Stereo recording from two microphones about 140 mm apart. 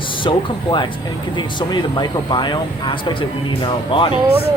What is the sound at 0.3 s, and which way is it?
Speech, 35° left (ahead or behind).